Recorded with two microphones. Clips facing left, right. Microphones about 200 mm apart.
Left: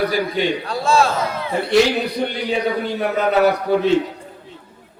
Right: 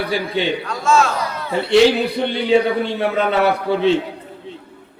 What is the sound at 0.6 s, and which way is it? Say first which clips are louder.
Speech: even; 35° left (ahead or behind).